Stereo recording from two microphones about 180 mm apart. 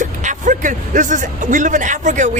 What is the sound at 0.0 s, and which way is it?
Speech, 45° right (ahead or behind).